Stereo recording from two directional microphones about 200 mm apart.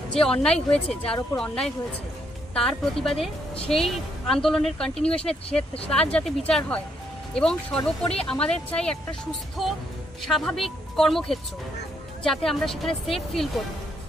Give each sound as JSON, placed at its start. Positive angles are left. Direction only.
{"t": 0.1, "sound": "speech", "side_deg": 5}